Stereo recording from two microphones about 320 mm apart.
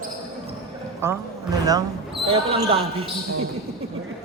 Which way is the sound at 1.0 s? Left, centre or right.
Centre.